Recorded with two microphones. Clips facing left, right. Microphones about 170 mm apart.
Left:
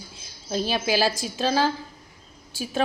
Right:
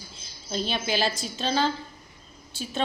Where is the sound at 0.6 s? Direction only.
10° left (ahead or behind).